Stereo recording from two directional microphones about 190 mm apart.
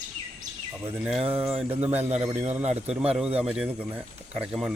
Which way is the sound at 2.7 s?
35° right (ahead or behind).